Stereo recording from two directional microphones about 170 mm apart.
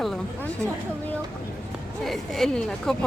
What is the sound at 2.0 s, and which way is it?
Speech, centre (ahead or behind).